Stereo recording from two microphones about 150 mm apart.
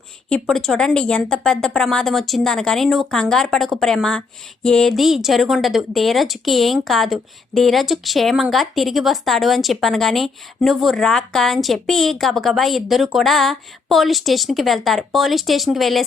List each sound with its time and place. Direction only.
0.3 s speech: 5° left (ahead or behind)